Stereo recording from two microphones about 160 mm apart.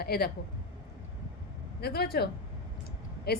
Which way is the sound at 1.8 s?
80° left.